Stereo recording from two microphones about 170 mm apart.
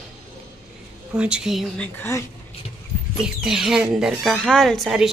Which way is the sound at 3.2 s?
5° right (ahead or behind).